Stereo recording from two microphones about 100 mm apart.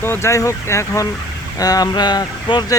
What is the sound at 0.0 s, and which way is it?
Speech, 25° left (ahead or behind).